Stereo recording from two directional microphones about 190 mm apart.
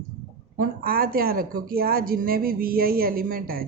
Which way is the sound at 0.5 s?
50° right (ahead or behind).